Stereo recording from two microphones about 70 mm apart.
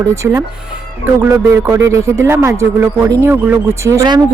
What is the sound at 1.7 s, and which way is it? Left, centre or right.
Speech, right.